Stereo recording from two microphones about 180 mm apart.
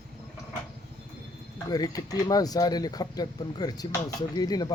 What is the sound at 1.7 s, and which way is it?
Speech, 20° left (ahead or behind).